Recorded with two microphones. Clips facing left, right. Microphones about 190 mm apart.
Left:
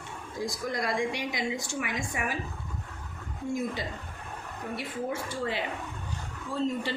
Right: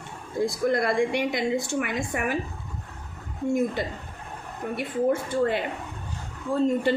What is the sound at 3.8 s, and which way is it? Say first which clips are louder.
Speech: right 6 dB; 55° right (ahead or behind).